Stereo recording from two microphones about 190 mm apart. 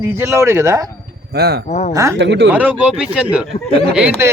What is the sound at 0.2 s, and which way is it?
Speech, 15° right (ahead or behind).